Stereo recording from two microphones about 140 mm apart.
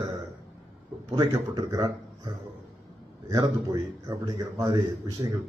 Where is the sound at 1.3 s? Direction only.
25° right (ahead or behind).